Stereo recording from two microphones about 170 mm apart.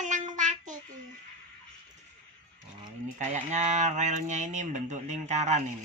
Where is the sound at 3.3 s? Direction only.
45° right (ahead or behind).